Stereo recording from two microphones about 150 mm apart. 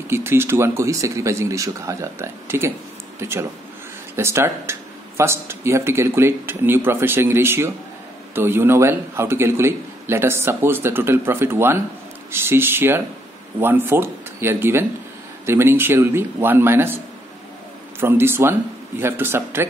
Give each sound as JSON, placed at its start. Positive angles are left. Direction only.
{"t": 0.1, "sound": "speech", "side_deg": -15}
{"t": 18.0, "sound": "speech", "side_deg": -15}